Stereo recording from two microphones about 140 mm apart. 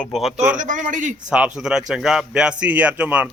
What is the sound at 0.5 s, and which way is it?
Speech, 65° right (ahead or behind).